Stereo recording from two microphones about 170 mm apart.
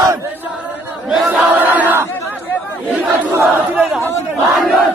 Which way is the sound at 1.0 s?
5° right (ahead or behind).